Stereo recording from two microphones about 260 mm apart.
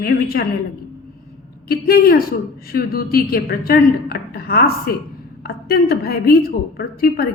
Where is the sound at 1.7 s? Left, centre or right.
Left.